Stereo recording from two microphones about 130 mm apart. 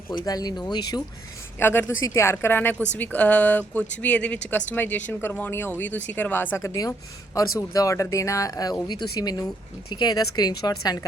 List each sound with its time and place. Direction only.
0.3 s speech: 30° left (ahead or behind)
1.5 s speech: 15° left (ahead or behind)